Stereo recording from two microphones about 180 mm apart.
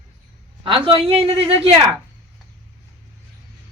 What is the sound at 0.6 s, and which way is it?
Speech, 30° right (ahead or behind).